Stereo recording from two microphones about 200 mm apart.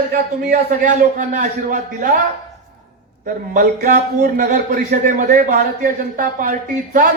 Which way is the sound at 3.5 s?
40° right (ahead or behind).